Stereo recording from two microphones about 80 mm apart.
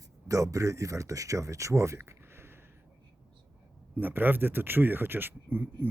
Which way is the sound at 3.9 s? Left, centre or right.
Right.